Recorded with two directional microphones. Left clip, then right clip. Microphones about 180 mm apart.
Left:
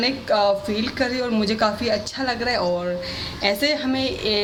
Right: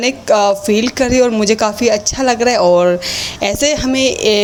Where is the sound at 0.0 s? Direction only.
35° right (ahead or behind).